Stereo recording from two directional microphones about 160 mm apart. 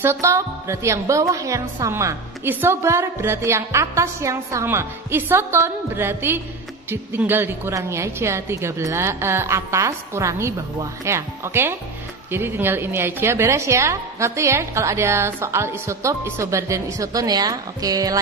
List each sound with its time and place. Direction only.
0.0 s a woman's voice: 15° right (ahead or behind)